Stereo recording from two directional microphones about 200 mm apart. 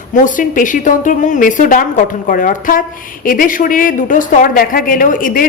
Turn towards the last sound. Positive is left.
turn(degrees=45)  # may be behind; listen again after turning